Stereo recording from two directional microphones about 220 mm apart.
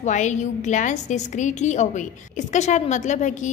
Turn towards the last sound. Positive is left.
turn(degrees=35)  # may be behind; listen again after turning